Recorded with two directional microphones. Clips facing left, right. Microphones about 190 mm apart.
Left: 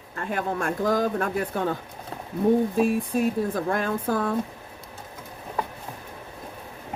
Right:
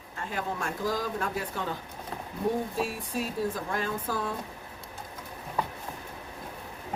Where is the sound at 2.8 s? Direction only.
55° left (ahead or behind).